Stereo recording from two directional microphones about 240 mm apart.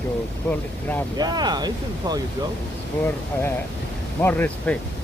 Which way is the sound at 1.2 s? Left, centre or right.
Centre.